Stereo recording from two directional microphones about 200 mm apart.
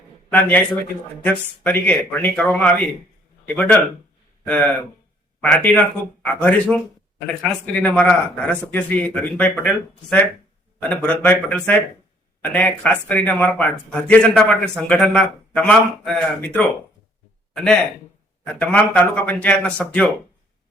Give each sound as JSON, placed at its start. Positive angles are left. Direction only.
{"t": 0.3, "sound": "speech", "side_deg": 10}